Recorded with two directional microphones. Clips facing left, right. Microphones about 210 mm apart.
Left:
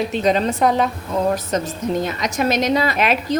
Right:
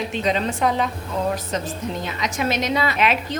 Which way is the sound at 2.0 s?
45° left (ahead or behind).